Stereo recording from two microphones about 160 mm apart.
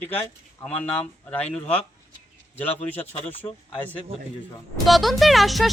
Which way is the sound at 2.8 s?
10° left (ahead or behind).